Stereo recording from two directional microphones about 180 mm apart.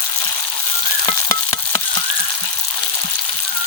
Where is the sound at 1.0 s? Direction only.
25° left (ahead or behind).